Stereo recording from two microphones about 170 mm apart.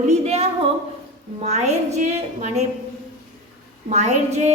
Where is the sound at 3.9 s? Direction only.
40° right (ahead or behind).